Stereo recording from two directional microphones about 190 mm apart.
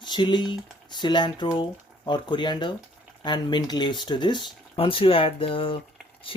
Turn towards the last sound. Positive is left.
turn(degrees=30)  # may be behind; listen again after turning